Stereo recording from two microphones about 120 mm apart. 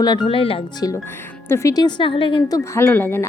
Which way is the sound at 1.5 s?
25° left (ahead or behind).